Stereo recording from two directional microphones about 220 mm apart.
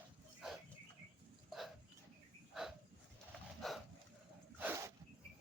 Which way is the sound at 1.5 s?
Centre (ahead or behind).